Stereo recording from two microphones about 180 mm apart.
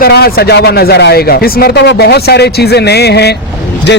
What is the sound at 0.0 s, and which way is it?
A man's voice, 60° left (ahead or behind).